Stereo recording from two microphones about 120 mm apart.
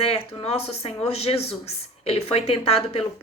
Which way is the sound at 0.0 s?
55° left (ahead or behind).